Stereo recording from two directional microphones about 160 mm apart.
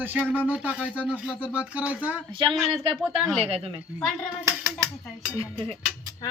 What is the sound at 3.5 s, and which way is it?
Speech, 40° right (ahead or behind).